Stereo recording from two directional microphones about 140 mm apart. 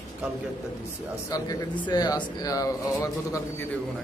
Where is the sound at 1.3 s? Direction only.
30° left (ahead or behind).